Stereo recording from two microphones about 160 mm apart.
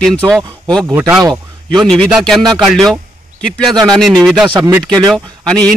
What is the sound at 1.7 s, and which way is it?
Speech, centre (ahead or behind).